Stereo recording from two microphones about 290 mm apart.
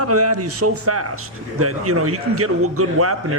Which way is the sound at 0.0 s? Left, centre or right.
Right.